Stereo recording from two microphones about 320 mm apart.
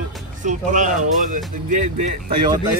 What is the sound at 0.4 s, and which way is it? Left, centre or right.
Speech, right.